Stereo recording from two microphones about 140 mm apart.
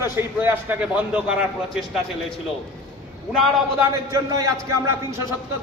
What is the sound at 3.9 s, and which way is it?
A man's voice, 25° right (ahead or behind).